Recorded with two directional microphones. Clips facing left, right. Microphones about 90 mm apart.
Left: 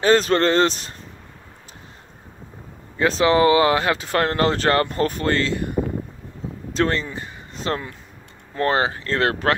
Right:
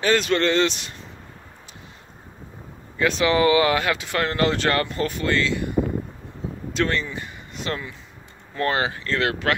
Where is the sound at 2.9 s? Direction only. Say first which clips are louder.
Left 3 dB; 30° left (ahead or behind).